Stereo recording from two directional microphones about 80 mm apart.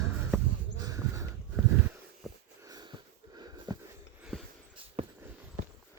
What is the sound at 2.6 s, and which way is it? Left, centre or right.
Wheeze, right.